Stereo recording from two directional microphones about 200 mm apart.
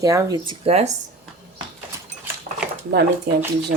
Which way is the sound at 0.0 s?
15° right (ahead or behind).